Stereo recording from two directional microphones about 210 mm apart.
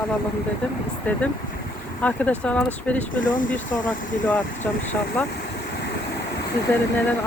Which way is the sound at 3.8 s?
5° left (ahead or behind).